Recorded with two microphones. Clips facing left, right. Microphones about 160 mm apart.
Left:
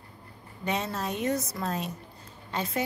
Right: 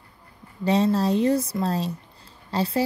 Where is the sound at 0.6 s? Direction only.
30° right (ahead or behind).